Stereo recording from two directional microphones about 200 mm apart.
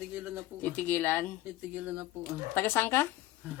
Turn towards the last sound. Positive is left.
turn(degrees=10)  # may be behind; listen again after turning